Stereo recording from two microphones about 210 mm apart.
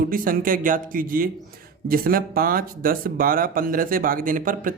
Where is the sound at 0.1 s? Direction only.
40° right (ahead or behind).